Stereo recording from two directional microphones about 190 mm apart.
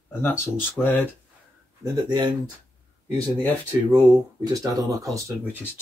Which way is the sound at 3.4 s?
10° left (ahead or behind).